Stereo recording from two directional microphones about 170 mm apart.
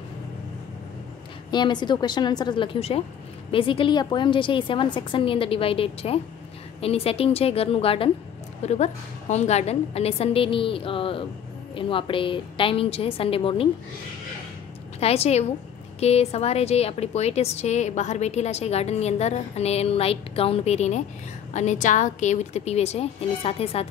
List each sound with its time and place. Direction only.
1.5 s a woman's voice: 25° left (ahead or behind)
15.0 s a woman's voice: 35° left (ahead or behind)